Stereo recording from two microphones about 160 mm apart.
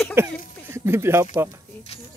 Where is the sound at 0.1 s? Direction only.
15° right (ahead or behind).